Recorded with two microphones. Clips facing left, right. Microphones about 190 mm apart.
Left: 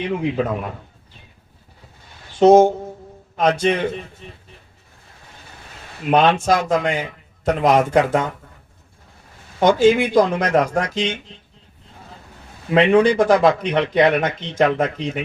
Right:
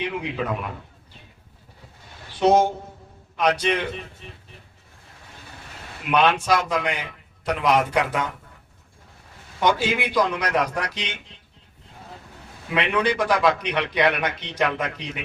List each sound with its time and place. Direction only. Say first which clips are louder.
2.4 s a man's voice: left 7 dB; 45° left (ahead or behind)
6.1 s a man's voice: left 4 dB; 45° left (ahead or behind)
9.6 s a man's voice: left 8 dB; 45° left (ahead or behind)
12.7 s a man's voice: left 9 dB; 45° left (ahead or behind)